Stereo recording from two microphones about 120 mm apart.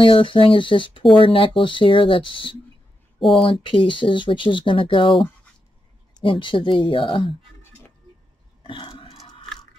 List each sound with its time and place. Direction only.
0.0 s speech: 45° left (ahead or behind)
3.2 s speech: centre (ahead or behind)
3.4 s speech: 45° left (ahead or behind)
6.1 s speech: 45° left (ahead or behind)
8.6 s a sound: 45° left (ahead or behind)